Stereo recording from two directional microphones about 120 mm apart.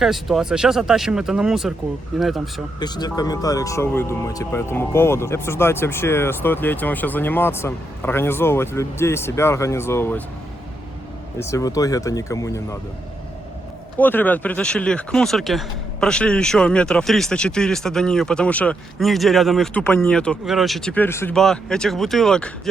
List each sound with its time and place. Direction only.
0.0 s speech: centre (ahead or behind)
2.8 s speech: 35° left (ahead or behind); by 10.2 s 15° left (ahead or behind)
11.3 s speech: 25° left (ahead or behind)
14.0 s speech: 15° left (ahead or behind)
19.7 s speech: 10° left (ahead or behind)
20.9 s speech: 20° left (ahead or behind)
21.3 s speech: 5° left (ahead or behind)